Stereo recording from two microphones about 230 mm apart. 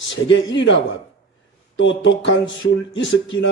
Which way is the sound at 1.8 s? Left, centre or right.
Left.